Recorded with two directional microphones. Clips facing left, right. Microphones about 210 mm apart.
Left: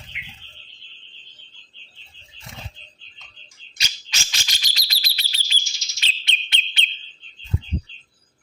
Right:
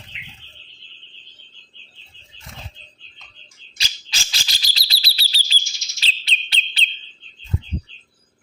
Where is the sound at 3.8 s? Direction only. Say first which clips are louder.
Right 1 dB; 35° right (ahead or behind).